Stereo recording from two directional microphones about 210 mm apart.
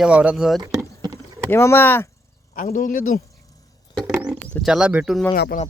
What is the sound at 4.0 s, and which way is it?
Speech, 5° right (ahead or behind).